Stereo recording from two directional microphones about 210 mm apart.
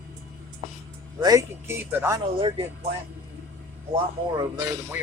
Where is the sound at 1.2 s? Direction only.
15° right (ahead or behind).